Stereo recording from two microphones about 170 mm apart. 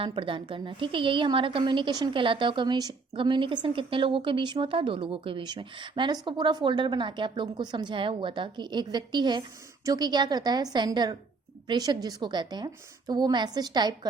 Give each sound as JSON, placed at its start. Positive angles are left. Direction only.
{"t": 0.0, "sound": "a woman's voice", "side_deg": -30}